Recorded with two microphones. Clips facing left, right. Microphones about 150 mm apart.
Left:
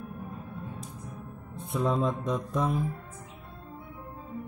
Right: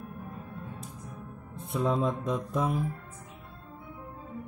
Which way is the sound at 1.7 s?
Centre (ahead or behind).